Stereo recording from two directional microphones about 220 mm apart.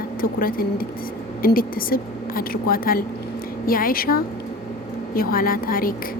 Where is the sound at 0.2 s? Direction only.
40° left (ahead or behind).